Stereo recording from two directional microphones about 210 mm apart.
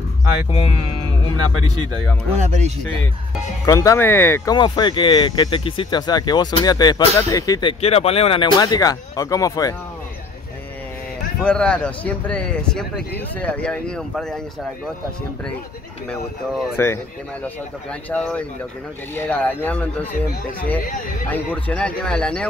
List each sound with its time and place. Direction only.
2.3 s speech: 35° right (ahead or behind)
3.6 s speech: 15° left (ahead or behind)
4.6 s speech: 20° left (ahead or behind)
7.8 s speech: 30° left (ahead or behind)
11.4 s speech: 5° left (ahead or behind)
16.1 s speech: 10° left (ahead or behind)
18.1 s speech: 5° left (ahead or behind)
21.3 s speech: 5° left (ahead or behind)